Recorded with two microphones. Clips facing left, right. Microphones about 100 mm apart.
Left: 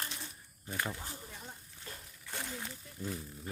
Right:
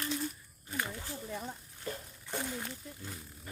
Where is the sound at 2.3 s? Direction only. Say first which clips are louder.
Right 4 dB; 10° right (ahead or behind).